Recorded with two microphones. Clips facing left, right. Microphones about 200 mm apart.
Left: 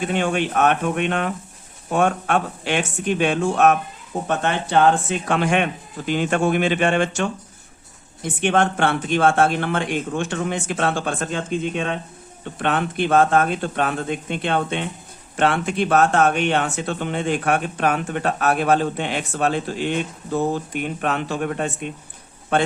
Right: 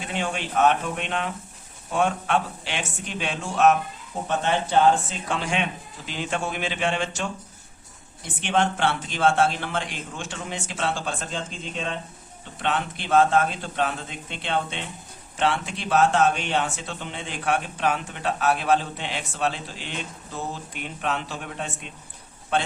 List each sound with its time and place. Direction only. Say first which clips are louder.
0.1 s speech: left 4 dB; 55° left (ahead or behind)